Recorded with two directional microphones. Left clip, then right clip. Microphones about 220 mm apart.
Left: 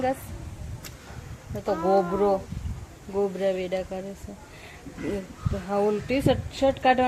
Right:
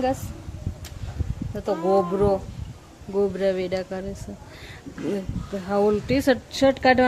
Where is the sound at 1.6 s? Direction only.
10° right (ahead or behind).